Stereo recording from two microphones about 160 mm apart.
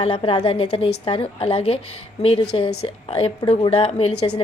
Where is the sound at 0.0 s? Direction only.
35° left (ahead or behind).